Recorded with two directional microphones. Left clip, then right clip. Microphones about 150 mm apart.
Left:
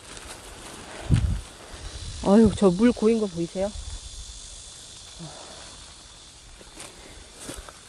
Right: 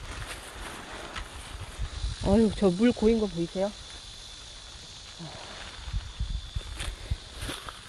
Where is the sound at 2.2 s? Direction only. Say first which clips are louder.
Left 5 dB; 35° left (ahead or behind); by 3.2 s 20° left (ahead or behind).